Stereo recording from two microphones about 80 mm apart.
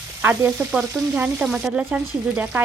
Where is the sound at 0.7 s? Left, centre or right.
Centre.